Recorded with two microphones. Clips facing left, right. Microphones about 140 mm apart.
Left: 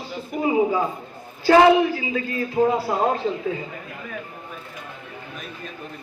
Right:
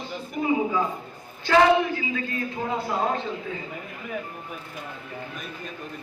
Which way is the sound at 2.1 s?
35° left (ahead or behind).